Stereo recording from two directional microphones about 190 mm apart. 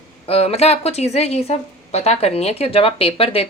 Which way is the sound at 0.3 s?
30° left (ahead or behind).